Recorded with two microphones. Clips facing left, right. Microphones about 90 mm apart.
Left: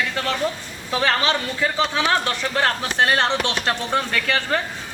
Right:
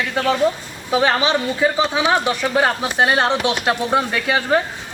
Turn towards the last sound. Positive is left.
turn(degrees=-15)  # may be behind; listen again after turning